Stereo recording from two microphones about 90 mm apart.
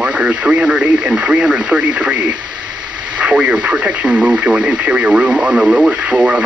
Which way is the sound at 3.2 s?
10° right (ahead or behind).